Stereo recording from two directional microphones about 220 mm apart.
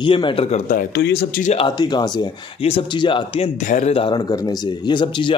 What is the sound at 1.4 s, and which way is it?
Speech, 25° left (ahead or behind).